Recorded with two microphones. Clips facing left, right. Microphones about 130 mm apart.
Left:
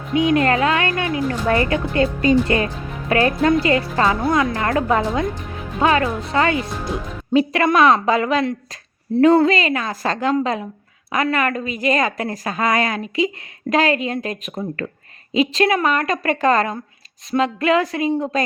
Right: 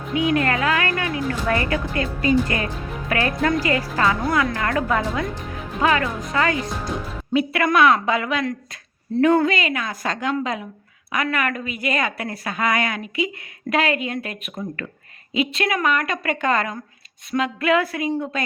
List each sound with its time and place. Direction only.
0.1 s a woman's voice: 25° left (ahead or behind)